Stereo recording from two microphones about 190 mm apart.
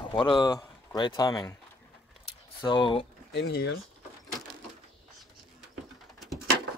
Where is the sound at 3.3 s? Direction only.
60° left (ahead or behind).